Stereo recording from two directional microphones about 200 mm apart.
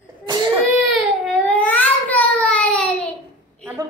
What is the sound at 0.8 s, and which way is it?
Baby cry, centre (ahead or behind).